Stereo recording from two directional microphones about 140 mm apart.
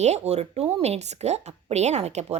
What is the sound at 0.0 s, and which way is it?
A woman's voice, 50° right (ahead or behind).